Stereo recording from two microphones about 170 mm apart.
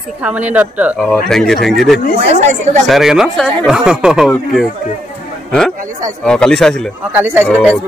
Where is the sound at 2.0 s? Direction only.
60° left (ahead or behind).